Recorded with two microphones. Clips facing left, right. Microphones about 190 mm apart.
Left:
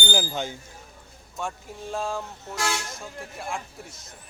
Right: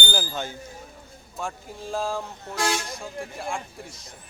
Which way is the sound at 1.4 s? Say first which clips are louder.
Even; centre (ahead or behind).